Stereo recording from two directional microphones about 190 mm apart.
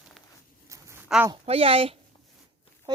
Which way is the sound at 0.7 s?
15° right (ahead or behind).